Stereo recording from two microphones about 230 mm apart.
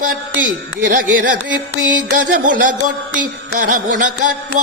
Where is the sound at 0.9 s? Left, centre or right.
Right.